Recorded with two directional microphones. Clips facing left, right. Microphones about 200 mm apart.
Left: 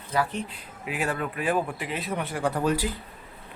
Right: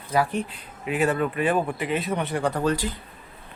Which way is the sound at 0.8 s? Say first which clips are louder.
Right 6 dB; centre (ahead or behind).